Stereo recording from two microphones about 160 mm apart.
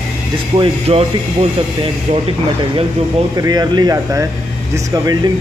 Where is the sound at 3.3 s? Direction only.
25° right (ahead or behind).